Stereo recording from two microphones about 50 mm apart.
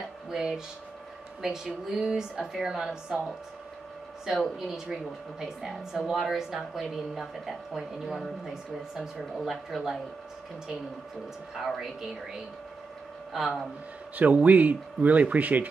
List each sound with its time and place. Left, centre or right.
0.3 s a woman's voice: centre
4.3 s a woman's voice: centre
9.3 s a woman's voice: centre
11.5 s a woman's voice: centre
14.1 s speech: right